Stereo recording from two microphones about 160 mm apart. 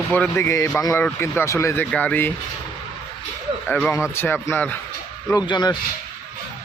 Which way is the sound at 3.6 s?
5° left (ahead or behind).